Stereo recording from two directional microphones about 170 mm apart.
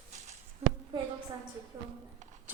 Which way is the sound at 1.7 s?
20° right (ahead or behind).